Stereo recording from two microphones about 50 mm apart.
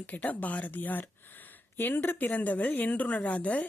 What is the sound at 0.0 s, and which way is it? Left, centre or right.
Speech, left.